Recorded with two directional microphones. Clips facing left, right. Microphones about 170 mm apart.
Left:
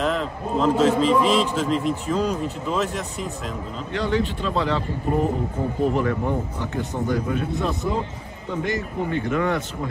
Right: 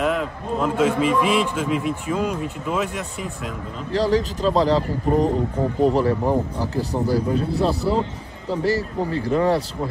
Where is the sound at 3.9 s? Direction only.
35° right (ahead or behind).